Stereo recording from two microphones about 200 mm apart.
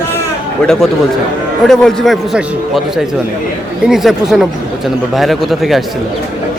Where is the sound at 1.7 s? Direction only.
Centre (ahead or behind).